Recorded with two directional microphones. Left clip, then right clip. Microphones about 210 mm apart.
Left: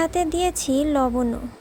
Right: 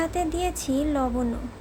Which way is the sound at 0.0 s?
35° left (ahead or behind).